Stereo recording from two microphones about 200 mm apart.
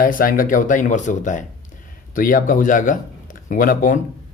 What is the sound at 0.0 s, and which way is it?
Speech, 45° left (ahead or behind).